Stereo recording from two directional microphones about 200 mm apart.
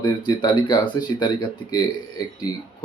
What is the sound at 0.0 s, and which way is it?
Speech, 20° left (ahead or behind).